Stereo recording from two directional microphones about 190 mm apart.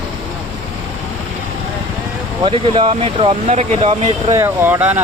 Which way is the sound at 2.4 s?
30° right (ahead or behind).